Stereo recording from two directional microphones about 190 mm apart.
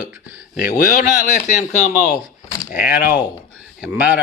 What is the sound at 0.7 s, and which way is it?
Speech, 40° left (ahead or behind).